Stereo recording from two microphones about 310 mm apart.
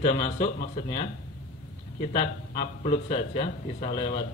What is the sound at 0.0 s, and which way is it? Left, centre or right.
Speech, centre.